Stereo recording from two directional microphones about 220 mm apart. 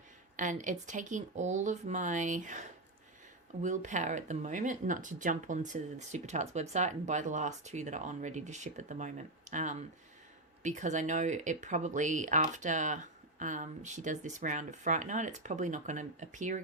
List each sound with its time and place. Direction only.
0.3 s speech: 35° right (ahead or behind)